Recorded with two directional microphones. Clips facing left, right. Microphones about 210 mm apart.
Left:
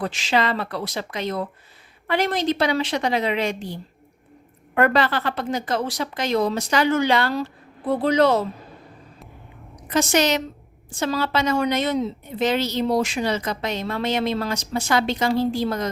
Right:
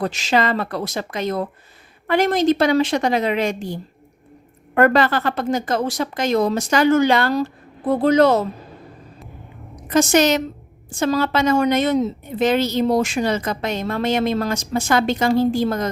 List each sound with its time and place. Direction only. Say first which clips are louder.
0.0 s a woman's voice: right 3 dB; 40° right (ahead or behind)
9.8 s a woman's voice: right 5 dB; 45° right (ahead or behind)